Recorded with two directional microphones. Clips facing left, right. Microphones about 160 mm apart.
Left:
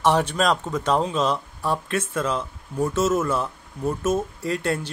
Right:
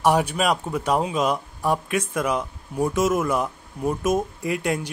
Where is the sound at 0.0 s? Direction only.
10° right (ahead or behind).